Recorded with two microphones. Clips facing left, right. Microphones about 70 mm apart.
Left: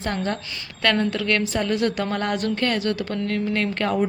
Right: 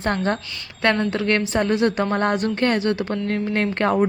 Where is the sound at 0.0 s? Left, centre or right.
Right.